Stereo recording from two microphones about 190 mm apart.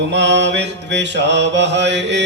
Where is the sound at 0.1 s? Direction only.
65° right (ahead or behind).